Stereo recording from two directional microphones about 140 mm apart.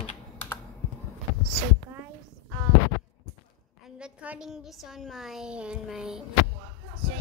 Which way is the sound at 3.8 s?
10° right (ahead or behind).